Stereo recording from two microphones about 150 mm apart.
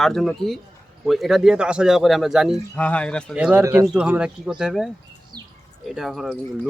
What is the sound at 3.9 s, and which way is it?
A man's voice, 5° right (ahead or behind).